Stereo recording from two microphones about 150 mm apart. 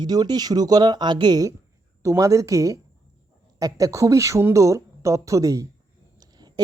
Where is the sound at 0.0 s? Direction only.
25° right (ahead or behind).